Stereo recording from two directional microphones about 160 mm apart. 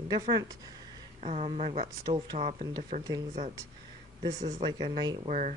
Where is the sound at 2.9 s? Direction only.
50° right (ahead or behind).